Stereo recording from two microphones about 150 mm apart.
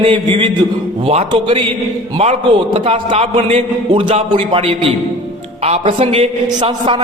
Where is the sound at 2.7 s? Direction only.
40° right (ahead or behind).